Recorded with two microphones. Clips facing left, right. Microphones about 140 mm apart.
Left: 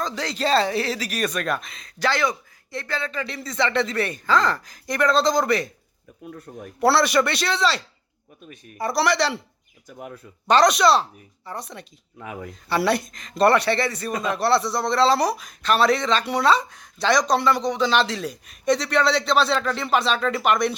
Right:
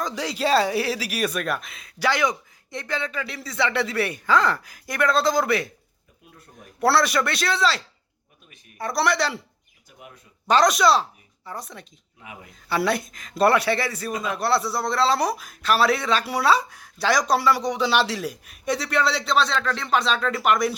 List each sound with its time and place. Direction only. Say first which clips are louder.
0.0 s speech: even; 10° right (ahead or behind)
3.2 s a man's voice: left 1 dB; 5° right (ahead or behind)
6.7 s a man's voice: left 2 dB; centre (ahead or behind)
8.8 s a man's voice: left 2 dB; centre (ahead or behind)
10.4 s a man's voice: left 1 dB; centre (ahead or behind)
12.2 s speech: left 8 dB; 50° left (ahead or behind)
12.6 s a man's voice: left 2 dB; centre (ahead or behind)